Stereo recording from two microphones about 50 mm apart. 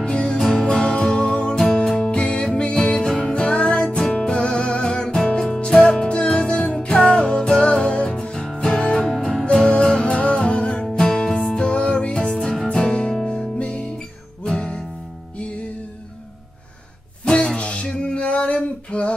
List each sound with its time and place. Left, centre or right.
0.0 s music: centre
17.2 s music: left